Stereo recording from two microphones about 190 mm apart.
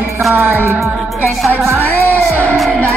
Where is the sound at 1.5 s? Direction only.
10° right (ahead or behind).